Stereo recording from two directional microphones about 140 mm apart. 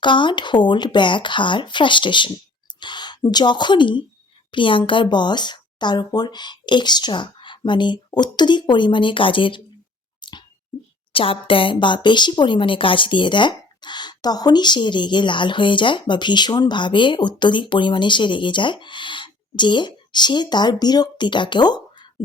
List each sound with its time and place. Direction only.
0.0 s speech: 35° left (ahead or behind)
10.2 s a sound: 30° left (ahead or behind)
11.1 s speech: 40° left (ahead or behind)